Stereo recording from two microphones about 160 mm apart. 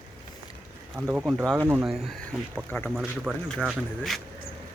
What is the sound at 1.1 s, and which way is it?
Speech, centre (ahead or behind).